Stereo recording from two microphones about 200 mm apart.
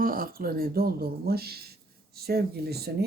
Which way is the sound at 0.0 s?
45° right (ahead or behind).